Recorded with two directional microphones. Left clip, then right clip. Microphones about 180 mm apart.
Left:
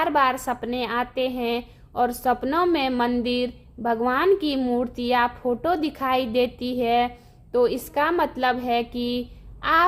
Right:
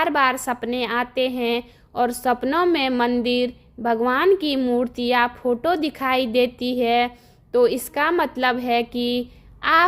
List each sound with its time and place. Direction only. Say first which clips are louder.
0.0 s a woman's voice: right 1 dB; 30° right (ahead or behind)